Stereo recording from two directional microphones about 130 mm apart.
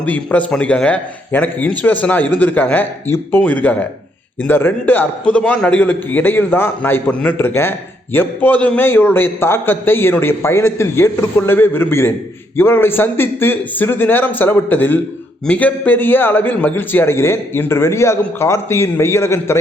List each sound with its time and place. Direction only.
0.0 s a man's voice: 10° left (ahead or behind)